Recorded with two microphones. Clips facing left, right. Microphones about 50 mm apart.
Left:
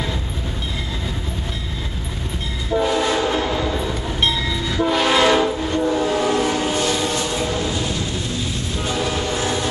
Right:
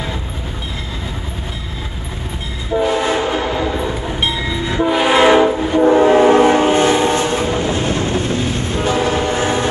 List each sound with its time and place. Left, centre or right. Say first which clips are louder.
2.7 s train: right 3 dB; centre
5.8 s train: right 10 dB; right